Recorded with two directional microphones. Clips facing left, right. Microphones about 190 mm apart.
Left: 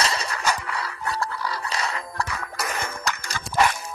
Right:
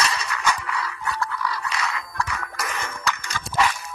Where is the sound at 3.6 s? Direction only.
50° left (ahead or behind).